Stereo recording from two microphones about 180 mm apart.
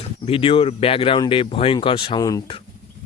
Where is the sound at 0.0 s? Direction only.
30° left (ahead or behind).